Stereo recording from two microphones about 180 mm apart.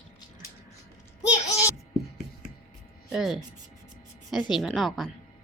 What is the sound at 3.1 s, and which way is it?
Speech, centre (ahead or behind).